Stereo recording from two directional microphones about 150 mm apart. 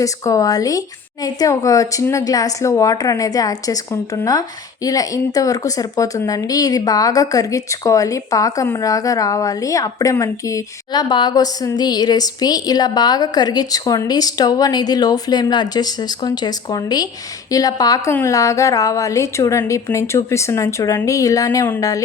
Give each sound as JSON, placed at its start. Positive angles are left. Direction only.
{"t": 0.0, "sound": "a woman's voice", "side_deg": 20}